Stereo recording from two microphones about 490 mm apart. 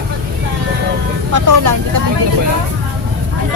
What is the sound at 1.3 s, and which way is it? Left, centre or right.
Speech, right.